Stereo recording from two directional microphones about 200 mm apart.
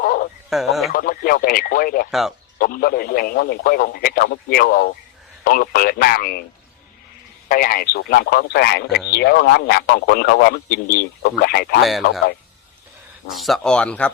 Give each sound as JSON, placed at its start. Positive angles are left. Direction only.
{"t": 0.0, "sound": "a sound", "side_deg": 45}
{"t": 0.5, "sound": "a sound", "side_deg": 0}
{"t": 0.9, "sound": "speech", "side_deg": 45}
{"t": 2.0, "sound": "speech", "side_deg": 0}
{"t": 2.6, "sound": "a man's voice", "side_deg": 45}
{"t": 7.4, "sound": "a man's voice", "side_deg": 45}
{"t": 11.8, "sound": "speech", "side_deg": 0}
{"t": 13.3, "sound": "speech", "side_deg": 0}